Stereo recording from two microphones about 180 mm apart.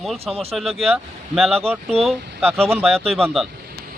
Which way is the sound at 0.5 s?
Centre (ahead or behind).